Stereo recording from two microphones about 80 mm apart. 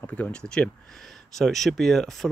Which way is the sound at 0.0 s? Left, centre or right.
Centre.